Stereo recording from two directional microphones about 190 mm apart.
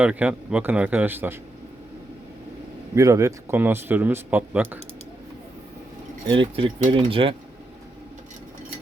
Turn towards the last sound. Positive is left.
turn(degrees=-30)  # may be behind; listen again after turning